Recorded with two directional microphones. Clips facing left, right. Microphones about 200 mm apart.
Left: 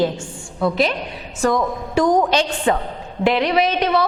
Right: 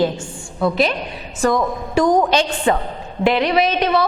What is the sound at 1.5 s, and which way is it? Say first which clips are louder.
Speech: right 1 dB; 30° right (ahead or behind).